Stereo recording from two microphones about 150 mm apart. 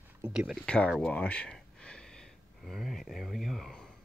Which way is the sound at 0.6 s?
5° left (ahead or behind).